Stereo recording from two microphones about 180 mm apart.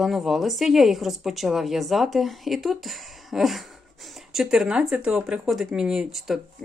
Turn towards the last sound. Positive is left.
turn(degrees=0)  # may be behind; listen again after turning